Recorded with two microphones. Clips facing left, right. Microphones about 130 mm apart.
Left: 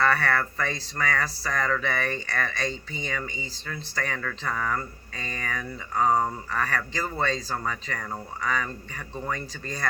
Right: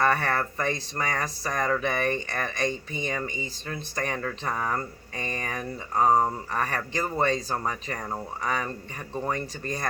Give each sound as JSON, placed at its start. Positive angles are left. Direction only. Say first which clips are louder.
{"t": 0.0, "sound": "speech", "louder": "even", "side_deg": -20}